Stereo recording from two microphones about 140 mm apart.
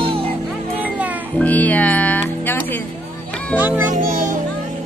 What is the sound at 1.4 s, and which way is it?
Music, 10° left (ahead or behind).